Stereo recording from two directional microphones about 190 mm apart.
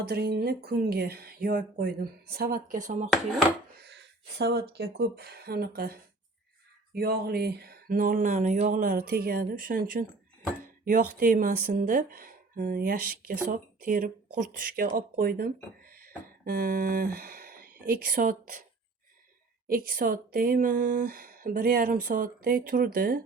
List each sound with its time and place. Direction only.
0.0 s speech: 55° right (ahead or behind)
3.1 s chopping: centre (ahead or behind)
3.8 s a sound: 60° right (ahead or behind)
4.7 s speech: 55° right (ahead or behind)
10.8 s speech: 45° right (ahead or behind)
19.6 s speech: 50° right (ahead or behind)